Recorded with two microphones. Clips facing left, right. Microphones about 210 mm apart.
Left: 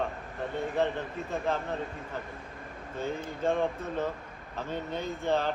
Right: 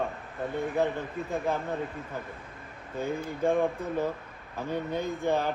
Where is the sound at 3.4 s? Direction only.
10° right (ahead or behind).